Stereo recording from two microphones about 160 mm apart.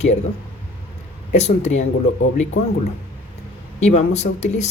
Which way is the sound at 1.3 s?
45° left (ahead or behind).